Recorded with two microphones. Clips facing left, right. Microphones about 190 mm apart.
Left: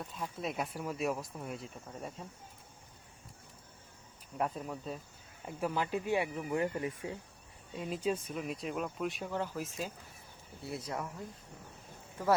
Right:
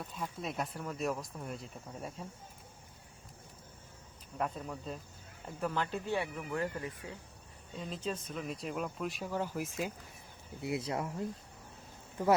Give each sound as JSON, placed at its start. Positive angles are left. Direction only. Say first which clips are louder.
{"t": 0.0, "sound": "speech", "louder": "left 1 dB", "side_deg": 0}
{"t": 4.4, "sound": "speech", "louder": "left 1 dB", "side_deg": 5}
{"t": 7.8, "sound": "speech", "louder": "left 4 dB", "side_deg": 10}
{"t": 10.6, "sound": "speech", "louder": "right 4 dB", "side_deg": -20}